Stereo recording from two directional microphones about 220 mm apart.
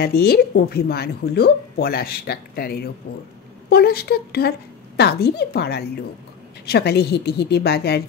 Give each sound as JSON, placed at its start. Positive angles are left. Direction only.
{"t": 0.0, "sound": "a woman's voice", "side_deg": 45}